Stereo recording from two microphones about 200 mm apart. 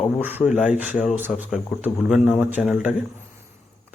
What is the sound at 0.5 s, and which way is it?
Speech, 35° left (ahead or behind).